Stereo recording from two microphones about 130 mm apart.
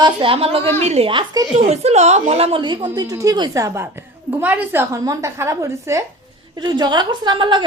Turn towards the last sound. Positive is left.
turn(degrees=-35)  # may be behind; listen again after turning